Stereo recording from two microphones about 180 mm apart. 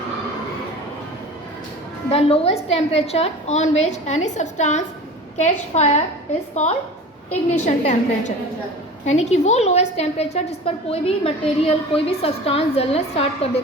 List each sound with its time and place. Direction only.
2.0 s a woman's voice: 35° left (ahead or behind)
7.6 s a woman's voice: 40° left (ahead or behind)